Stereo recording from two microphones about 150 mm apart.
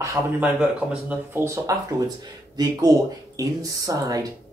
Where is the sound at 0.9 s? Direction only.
10° right (ahead or behind).